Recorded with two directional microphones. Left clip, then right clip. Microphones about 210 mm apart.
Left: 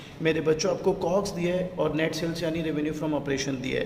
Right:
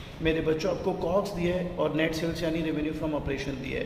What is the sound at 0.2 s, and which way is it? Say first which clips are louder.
A man's voice: left 2 dB; 30° left (ahead or behind).